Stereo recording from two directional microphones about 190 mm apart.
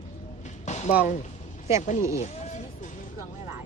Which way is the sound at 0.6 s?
35° left (ahead or behind).